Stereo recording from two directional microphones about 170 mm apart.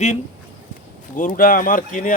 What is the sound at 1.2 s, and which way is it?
Speech, 55° left (ahead or behind).